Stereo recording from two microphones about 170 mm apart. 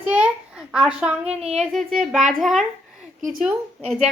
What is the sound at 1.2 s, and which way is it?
Speech, 40° right (ahead or behind).